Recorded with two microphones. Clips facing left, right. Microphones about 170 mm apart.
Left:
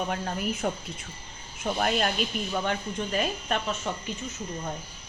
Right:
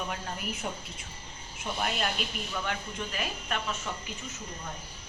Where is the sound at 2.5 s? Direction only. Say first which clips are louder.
Left 6 dB; 35° left (ahead or behind).